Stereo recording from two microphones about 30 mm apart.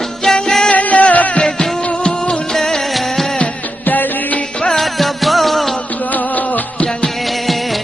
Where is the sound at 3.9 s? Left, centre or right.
Left.